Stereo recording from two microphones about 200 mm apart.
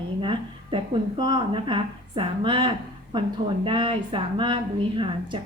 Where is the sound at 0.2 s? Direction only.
25° right (ahead or behind).